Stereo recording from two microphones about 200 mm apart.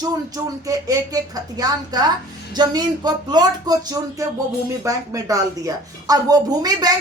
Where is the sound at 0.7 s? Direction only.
20° right (ahead or behind).